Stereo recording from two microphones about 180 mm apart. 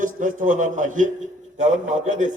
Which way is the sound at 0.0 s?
45° right (ahead or behind).